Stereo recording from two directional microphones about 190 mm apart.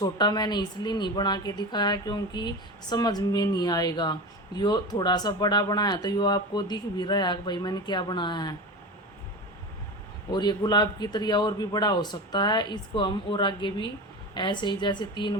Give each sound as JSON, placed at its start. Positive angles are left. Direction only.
{"t": 0.0, "sound": "a woman's voice", "side_deg": 20}
{"t": 10.3, "sound": "a woman's voice", "side_deg": 20}